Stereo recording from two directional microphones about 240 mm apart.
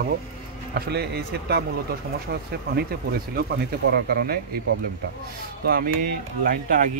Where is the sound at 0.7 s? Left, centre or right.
Right.